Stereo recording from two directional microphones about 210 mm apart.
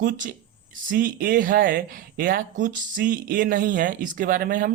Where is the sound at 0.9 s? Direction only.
40° right (ahead or behind).